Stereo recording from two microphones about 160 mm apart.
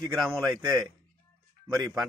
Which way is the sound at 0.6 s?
25° right (ahead or behind).